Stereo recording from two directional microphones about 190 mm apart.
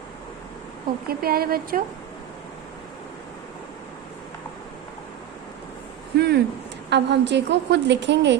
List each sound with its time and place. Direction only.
1.0 s a woman's voice: 50° right (ahead or behind)
6.1 s a woman's voice: 60° right (ahead or behind)